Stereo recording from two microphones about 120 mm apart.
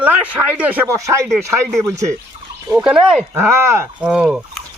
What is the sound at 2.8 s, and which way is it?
Speech, 5° right (ahead or behind).